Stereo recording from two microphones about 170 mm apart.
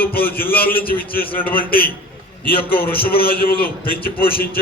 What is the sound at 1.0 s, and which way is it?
A man's voice, 60° left (ahead or behind).